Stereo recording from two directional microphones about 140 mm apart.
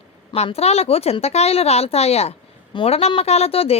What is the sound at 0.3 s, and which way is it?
A woman's voice, 45° left (ahead or behind).